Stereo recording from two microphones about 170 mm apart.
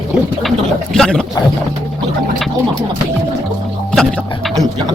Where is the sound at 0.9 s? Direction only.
5° left (ahead or behind).